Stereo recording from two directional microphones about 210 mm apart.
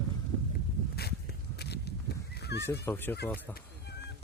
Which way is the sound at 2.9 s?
10° left (ahead or behind).